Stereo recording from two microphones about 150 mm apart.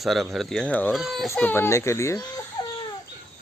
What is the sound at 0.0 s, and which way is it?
Speech, centre (ahead or behind).